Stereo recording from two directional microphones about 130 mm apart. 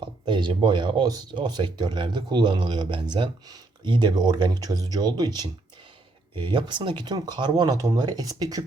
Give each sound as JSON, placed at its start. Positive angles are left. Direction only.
{"t": 0.3, "sound": "speech", "side_deg": -40}